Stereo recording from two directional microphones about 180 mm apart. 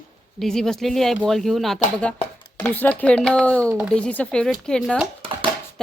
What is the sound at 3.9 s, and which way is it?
A woman's voice, 5° left (ahead or behind).